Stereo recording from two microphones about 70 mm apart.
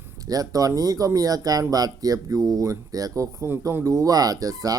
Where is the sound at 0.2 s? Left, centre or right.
Right.